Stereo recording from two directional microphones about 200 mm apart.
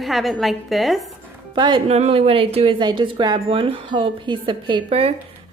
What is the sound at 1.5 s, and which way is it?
A woman's voice, 25° right (ahead or behind).